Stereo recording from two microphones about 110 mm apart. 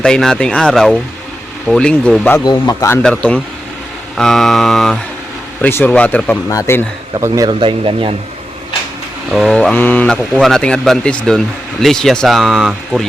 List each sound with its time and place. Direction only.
0.0 s speech: 5° left (ahead or behind)
2.4 s speech: 35° left (ahead or behind)
3.0 s speech: 10° left (ahead or behind)
5.6 s speech: 15° left (ahead or behind)
6.5 s speech: 30° left (ahead or behind)
7.2 s speech: 30° right (ahead or behind)
7.6 s speech: 50° right (ahead or behind)
9.3 s speech: centre (ahead or behind)
9.7 s speech: 15° left (ahead or behind); by 13.1 s centre (ahead or behind)